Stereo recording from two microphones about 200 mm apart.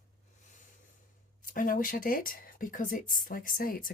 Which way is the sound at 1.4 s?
45° left (ahead or behind).